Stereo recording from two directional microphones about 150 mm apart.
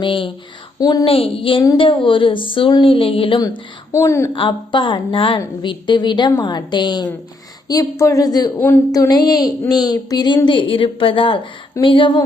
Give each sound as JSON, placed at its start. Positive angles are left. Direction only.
{"t": 0.0, "sound": "speech", "side_deg": 35}
{"t": 0.8, "sound": "a woman's voice", "side_deg": 25}
{"t": 1.0, "sound": "speech", "side_deg": 40}
{"t": 3.9, "sound": "a woman's voice", "side_deg": 20}
{"t": 4.3, "sound": "a woman's voice", "side_deg": 30}
{"t": 8.5, "sound": "a woman's voice", "side_deg": 15}
{"t": 8.9, "sound": "a woman's voice", "side_deg": 25}